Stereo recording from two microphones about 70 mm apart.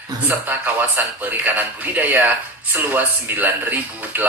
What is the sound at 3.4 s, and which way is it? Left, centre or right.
Speech, right.